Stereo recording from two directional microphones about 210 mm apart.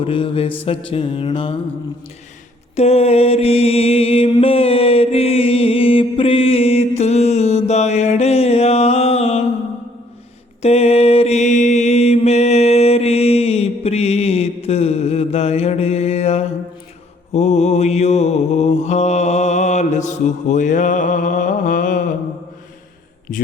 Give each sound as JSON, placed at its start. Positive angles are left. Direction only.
{"t": 0.0, "sound": "a sound", "side_deg": 25}
{"t": 2.7, "sound": "mantra", "side_deg": 30}
{"t": 10.6, "sound": "mantra", "side_deg": 30}
{"t": 23.3, "sound": "a man's voice", "side_deg": 40}